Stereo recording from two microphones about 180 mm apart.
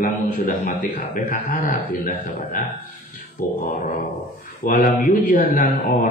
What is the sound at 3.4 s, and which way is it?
Speech, 50° left (ahead or behind).